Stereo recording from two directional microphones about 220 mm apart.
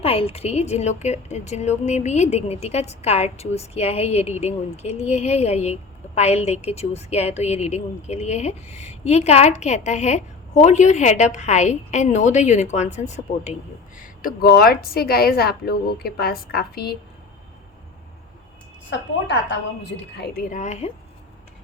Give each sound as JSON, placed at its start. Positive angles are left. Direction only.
{"t": 0.0, "sound": "a woman's voice", "side_deg": 25}
{"t": 18.9, "sound": "a woman's voice", "side_deg": 55}